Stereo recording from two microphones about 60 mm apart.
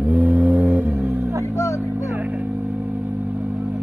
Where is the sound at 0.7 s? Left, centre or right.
Right.